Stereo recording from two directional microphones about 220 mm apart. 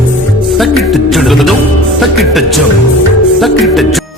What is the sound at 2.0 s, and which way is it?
Speech, centre (ahead or behind).